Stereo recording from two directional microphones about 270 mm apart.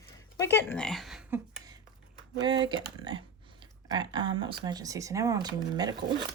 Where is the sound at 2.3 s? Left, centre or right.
Centre.